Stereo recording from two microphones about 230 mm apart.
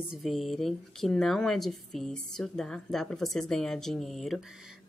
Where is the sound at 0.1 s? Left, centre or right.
Centre.